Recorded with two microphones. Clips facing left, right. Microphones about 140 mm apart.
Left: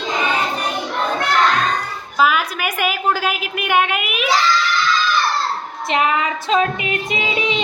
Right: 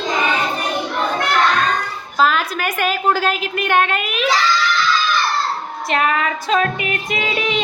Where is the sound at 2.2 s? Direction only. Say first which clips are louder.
Even; 10° left (ahead or behind).